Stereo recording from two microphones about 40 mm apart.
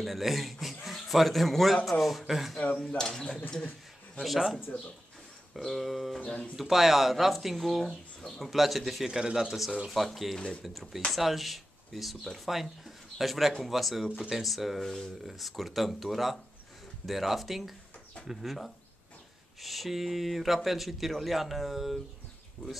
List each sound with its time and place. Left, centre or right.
0.0 s a man's voice: centre
3.0 s speech: centre
4.7 s speech: left
5.6 s speech: centre
6.2 s speech: left
6.5 s speech: centre
9.0 s speech: centre
9.8 s speech: centre
14.8 s speech: centre
15.2 s speech: centre